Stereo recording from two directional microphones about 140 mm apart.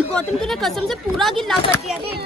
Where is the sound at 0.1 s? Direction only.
Centre (ahead or behind).